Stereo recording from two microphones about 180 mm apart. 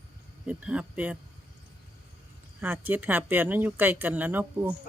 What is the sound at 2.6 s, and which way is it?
Speech, 10° right (ahead or behind).